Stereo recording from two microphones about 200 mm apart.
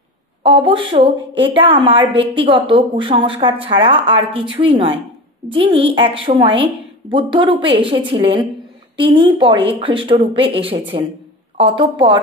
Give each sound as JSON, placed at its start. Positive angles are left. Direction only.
{"t": 0.4, "sound": "a woman's voice", "side_deg": -25}